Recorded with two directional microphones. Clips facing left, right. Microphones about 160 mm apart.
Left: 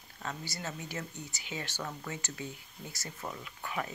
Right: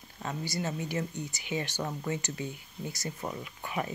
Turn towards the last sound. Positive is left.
turn(degrees=-15)  # may be behind; listen again after turning